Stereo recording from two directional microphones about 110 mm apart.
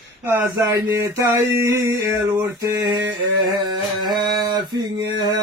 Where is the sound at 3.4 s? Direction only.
40° right (ahead or behind).